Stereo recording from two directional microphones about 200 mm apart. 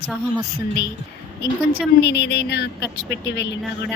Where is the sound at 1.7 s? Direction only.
55° left (ahead or behind).